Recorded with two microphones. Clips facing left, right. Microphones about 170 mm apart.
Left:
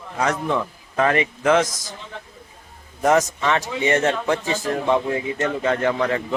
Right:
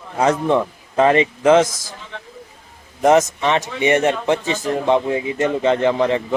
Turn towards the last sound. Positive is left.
turn(degrees=-20)  # may be behind; listen again after turning